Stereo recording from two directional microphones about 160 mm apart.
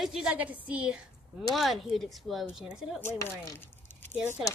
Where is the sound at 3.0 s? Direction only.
15° left (ahead or behind).